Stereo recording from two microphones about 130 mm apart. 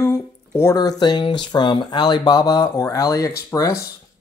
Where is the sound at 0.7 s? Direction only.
30° left (ahead or behind).